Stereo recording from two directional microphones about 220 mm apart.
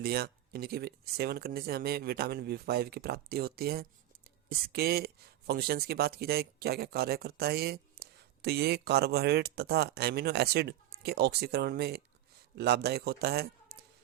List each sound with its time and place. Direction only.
0.0 s speech: 45° right (ahead or behind)